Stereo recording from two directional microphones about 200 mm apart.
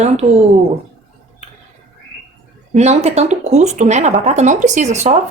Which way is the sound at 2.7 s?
35° right (ahead or behind).